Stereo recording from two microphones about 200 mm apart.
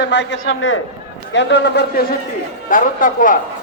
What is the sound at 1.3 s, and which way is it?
Speech, 60° left (ahead or behind).